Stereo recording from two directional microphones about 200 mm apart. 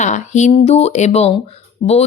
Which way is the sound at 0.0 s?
35° left (ahead or behind).